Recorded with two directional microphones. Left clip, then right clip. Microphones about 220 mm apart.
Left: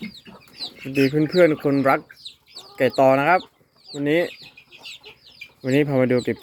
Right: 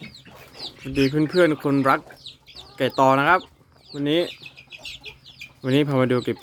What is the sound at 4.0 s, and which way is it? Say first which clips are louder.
Speech: left 2 dB; 55° right (ahead or behind).